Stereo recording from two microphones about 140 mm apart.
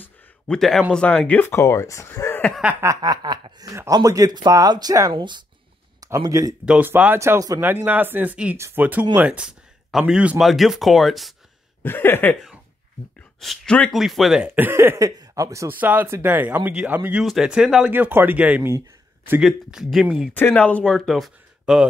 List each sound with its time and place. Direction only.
0.0 s a sound: 5° left (ahead or behind)
0.9 s speech: 10° left (ahead or behind)
2.6 s speech: 10° right (ahead or behind)
2.9 s speech: 30° right (ahead or behind)
6.6 s speech: 10° right (ahead or behind)
11.8 s speech: 15° left (ahead or behind)
13.4 s speech: 5° left (ahead or behind)
14.4 s speech: 15° right (ahead or behind)
19.4 s speech: centre (ahead or behind)
20.3 s speech: 10° left (ahead or behind)